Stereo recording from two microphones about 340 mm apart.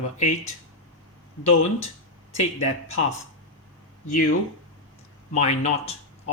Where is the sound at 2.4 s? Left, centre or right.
Centre.